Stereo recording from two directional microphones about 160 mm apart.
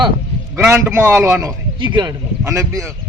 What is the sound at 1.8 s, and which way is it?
A man's voice, 30° right (ahead or behind).